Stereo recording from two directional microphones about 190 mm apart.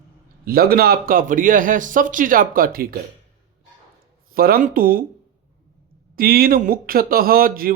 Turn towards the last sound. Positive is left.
turn(degrees=-50)  # may be behind; listen again after turning